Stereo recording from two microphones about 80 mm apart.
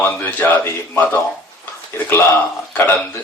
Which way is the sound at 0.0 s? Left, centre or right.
Left.